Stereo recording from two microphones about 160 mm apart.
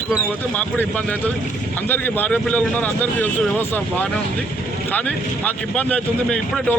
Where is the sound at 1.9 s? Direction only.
10° left (ahead or behind).